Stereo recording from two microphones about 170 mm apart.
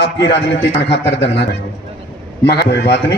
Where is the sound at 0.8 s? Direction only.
90° left.